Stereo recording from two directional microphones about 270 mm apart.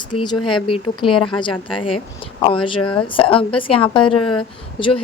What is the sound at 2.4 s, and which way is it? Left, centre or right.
A woman's voice, centre.